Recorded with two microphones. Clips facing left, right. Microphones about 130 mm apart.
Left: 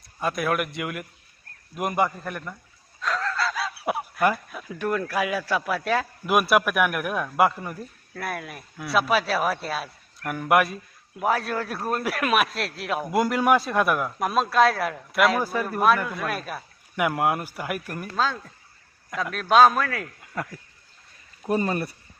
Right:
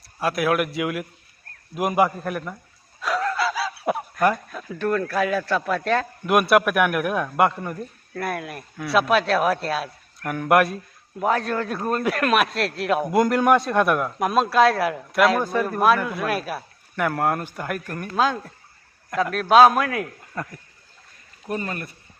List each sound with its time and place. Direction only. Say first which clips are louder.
0.2 s speech: right 4 dB; centre (ahead or behind)
17.0 s speech: right 1 dB; 10° left (ahead or behind)
19.1 s a man's voice: right 3 dB; centre (ahead or behind)
20.4 s speech: even; centre (ahead or behind)
21.5 s speech: left 4 dB; 35° left (ahead or behind)